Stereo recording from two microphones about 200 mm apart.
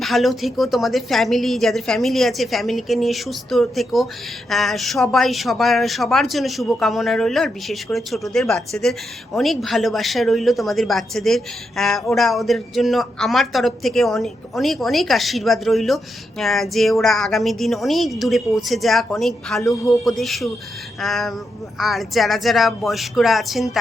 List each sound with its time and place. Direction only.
0.0 s a woman's voice: centre (ahead or behind)